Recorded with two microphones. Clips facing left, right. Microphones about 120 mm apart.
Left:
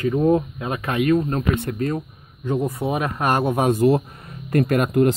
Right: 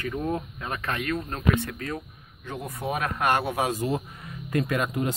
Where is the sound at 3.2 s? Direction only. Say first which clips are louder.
Left 6 dB; 40° left (ahead or behind); by 4.0 s 60° left (ahead or behind).